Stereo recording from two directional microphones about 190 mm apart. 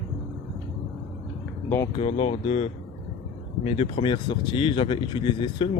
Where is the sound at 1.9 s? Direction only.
30° left (ahead or behind).